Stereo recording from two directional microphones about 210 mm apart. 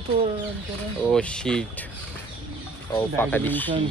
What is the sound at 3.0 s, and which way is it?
Speech, 10° left (ahead or behind).